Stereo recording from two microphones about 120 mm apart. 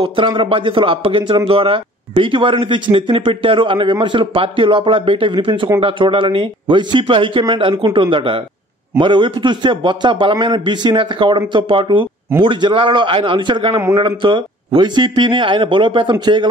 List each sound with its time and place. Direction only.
0.0 s a man's voice: 45° right (ahead or behind)